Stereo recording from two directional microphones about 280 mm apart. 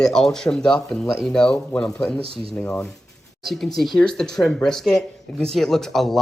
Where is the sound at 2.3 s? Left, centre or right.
Centre.